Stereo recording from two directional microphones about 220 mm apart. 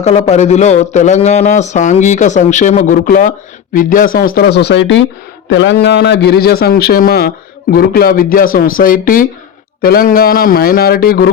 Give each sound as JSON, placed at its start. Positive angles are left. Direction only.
{"t": 0.0, "sound": "a man's voice", "side_deg": 30}